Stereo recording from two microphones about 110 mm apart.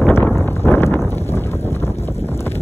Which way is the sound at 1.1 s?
20° left (ahead or behind).